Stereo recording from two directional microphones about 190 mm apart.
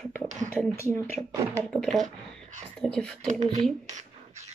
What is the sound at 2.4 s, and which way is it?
Whispering, 40° right (ahead or behind).